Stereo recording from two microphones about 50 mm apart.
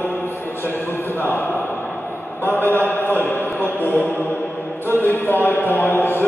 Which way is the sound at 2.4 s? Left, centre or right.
Left.